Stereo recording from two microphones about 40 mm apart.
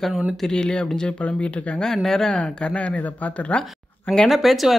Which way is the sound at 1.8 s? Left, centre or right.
Centre.